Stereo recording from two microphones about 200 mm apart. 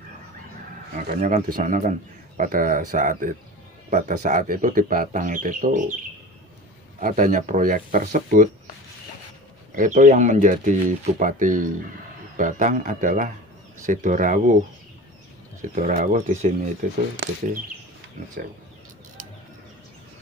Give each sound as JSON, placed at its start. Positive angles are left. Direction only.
{"t": 0.9, "sound": "a man's voice", "side_deg": -45}
{"t": 7.0, "sound": "speech", "side_deg": -40}
{"t": 9.8, "sound": "speech", "side_deg": -40}
{"t": 15.7, "sound": "speech", "side_deg": -40}